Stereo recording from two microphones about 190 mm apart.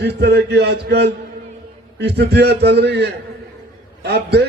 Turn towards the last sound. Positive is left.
turn(degrees=-60)  # may be behind; listen again after turning